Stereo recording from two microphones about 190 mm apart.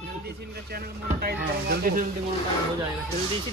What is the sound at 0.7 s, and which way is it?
Speech, 55° right (ahead or behind).